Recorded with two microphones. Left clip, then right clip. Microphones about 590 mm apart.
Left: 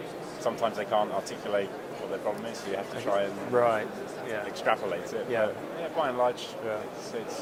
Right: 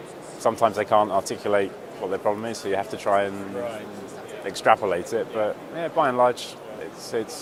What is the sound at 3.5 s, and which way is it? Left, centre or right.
Speech, left.